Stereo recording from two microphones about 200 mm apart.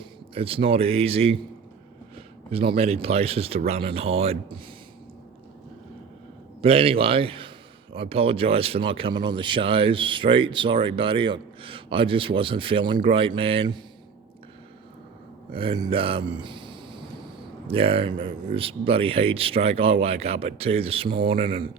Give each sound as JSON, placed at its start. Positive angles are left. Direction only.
{"t": 0.3, "sound": "speech", "side_deg": -30}
{"t": 2.5, "sound": "speech", "side_deg": -30}
{"t": 6.6, "sound": "speech", "side_deg": -30}
{"t": 15.5, "sound": "speech", "side_deg": -25}
{"t": 16.4, "sound": "a sound", "side_deg": -25}
{"t": 17.7, "sound": "speech", "side_deg": -30}